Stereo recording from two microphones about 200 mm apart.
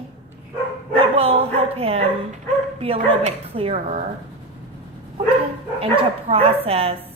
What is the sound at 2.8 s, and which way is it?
Speech, 30° right (ahead or behind).